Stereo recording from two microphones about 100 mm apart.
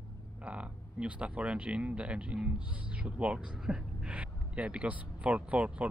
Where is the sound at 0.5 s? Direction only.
10° right (ahead or behind).